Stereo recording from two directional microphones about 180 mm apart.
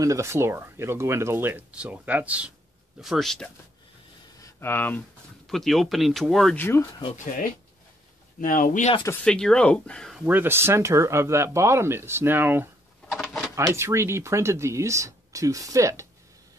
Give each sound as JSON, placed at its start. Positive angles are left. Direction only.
{"t": 0.0, "sound": "speech", "side_deg": -15}
{"t": 4.4, "sound": "speech", "side_deg": 15}
{"t": 8.4, "sound": "speech", "side_deg": 50}
{"t": 9.2, "sound": "speech", "side_deg": 5}
{"t": 10.2, "sound": "speech", "side_deg": -10}
{"t": 13.1, "sound": "drawer open or close", "side_deg": 0}
{"t": 13.6, "sound": "speech", "side_deg": -15}